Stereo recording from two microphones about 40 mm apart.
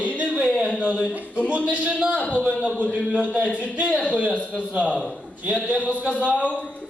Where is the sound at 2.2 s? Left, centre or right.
Left.